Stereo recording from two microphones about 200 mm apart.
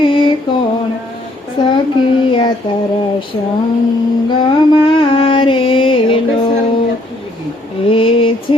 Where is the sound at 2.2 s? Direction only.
25° left (ahead or behind).